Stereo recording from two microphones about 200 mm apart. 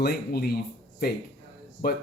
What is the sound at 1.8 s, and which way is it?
Speech, 50° left (ahead or behind).